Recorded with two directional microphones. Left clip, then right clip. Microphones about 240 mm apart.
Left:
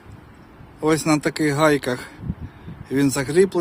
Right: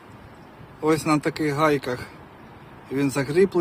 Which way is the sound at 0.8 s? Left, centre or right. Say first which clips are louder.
Left 2 dB; left.